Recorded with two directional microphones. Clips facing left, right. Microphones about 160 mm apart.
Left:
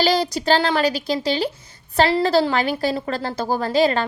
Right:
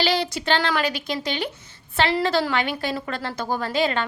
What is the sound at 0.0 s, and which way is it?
A woman's voice, 40° left (ahead or behind).